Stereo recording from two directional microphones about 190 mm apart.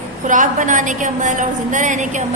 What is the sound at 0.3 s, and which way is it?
A woman's voice, 40° right (ahead or behind).